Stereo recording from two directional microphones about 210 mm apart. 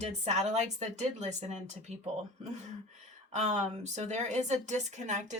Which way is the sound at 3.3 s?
35° right (ahead or behind).